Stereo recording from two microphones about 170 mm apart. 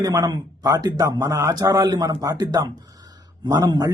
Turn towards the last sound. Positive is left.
turn(degrees=-20)  # may be behind; listen again after turning